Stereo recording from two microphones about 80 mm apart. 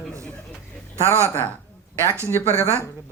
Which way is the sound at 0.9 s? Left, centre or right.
Right.